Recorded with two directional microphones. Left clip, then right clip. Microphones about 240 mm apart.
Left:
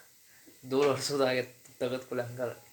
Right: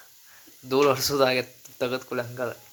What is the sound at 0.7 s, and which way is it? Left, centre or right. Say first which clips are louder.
Speech: right 6 dB; right.